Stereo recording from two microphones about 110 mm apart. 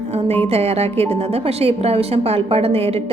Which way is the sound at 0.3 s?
70° right (ahead or behind).